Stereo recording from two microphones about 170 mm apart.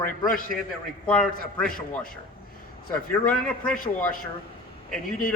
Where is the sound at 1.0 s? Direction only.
5° left (ahead or behind).